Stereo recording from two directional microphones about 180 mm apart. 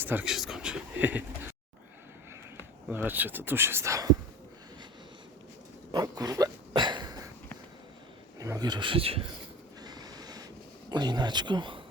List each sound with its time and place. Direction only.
0.0 s a sound: 10° right (ahead or behind)
2.9 s speech: 10° right (ahead or behind)
5.9 s a sound: 20° right (ahead or behind)
8.4 s speech: 20° right (ahead or behind)
9.8 s train: 25° right (ahead or behind)
10.9 s speech: 25° right (ahead or behind)